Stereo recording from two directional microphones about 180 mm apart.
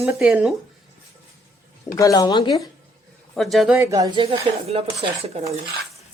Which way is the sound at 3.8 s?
20° right (ahead or behind).